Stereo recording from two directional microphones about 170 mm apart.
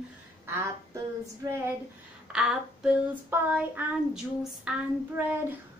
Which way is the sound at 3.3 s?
10° right (ahead or behind).